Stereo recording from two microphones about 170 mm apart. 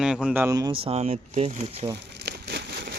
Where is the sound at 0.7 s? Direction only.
35° right (ahead or behind).